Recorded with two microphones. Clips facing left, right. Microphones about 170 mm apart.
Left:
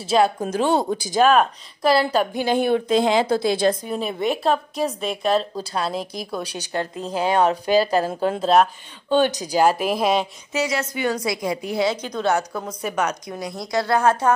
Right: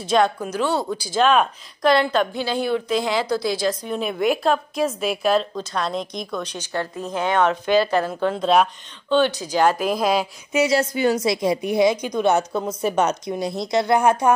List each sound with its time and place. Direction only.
0.0 s a woman's voice: 5° left (ahead or behind)
0.7 s speech: 50° left (ahead or behind)
1.2 s a woman's voice: 5° left (ahead or behind)
2.5 s speech: 55° left (ahead or behind)
2.9 s a woman's voice: 25° left (ahead or behind)
3.2 s speech: 50° left (ahead or behind)
3.8 s a woman's voice: 5° left (ahead or behind)
6.5 s a woman's voice: 15° left (ahead or behind)
7.1 s speech: 35° left (ahead or behind)
8.4 s a woman's voice: centre (ahead or behind)
9.1 s speech: 45° left (ahead or behind)
9.4 s a woman's voice: 10° left (ahead or behind)
10.7 s a woman's voice: 30° right (ahead or behind); by 14.3 s 15° right (ahead or behind)